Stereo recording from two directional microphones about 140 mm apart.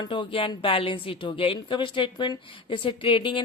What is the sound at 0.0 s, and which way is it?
A woman's voice, 35° left (ahead or behind).